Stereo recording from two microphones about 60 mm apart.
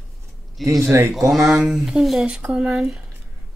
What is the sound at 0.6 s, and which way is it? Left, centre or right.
Speech, right.